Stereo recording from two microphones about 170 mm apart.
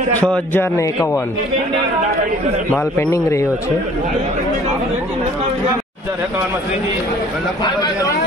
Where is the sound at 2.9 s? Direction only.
15° left (ahead or behind).